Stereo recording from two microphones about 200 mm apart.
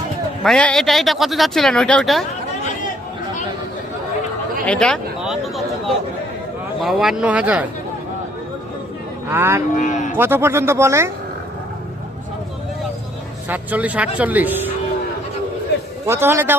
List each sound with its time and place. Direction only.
0.4 s speech: 5° left (ahead or behind)
4.6 s speech: 5° left (ahead or behind)
6.8 s speech: centre (ahead or behind)
9.3 s speech: 10° right (ahead or behind)
9.7 s speech: 40° left (ahead or behind)
10.2 s speech: 10° right (ahead or behind)
13.5 s speech: 10° right (ahead or behind)
16.0 s speech: 15° right (ahead or behind)